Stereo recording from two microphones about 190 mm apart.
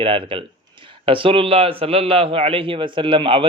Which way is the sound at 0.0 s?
25° right (ahead or behind).